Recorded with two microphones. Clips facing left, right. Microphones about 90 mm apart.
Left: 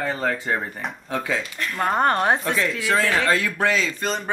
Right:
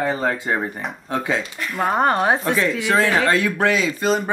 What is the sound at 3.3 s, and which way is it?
Speech, 20° right (ahead or behind).